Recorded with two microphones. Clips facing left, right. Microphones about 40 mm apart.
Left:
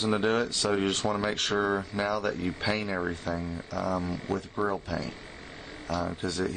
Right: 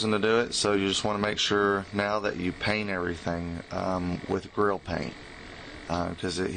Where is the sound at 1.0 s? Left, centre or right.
Centre.